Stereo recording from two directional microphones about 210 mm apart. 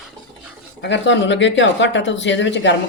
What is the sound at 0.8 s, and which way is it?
A woman's voice, 60° left (ahead or behind).